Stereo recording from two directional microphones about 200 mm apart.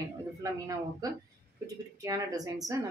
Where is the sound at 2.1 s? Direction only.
20° right (ahead or behind).